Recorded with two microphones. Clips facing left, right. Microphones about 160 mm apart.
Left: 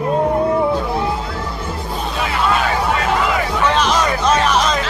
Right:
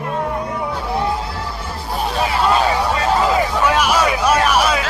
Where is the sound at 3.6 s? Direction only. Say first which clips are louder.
Left 2 dB; 10° right (ahead or behind).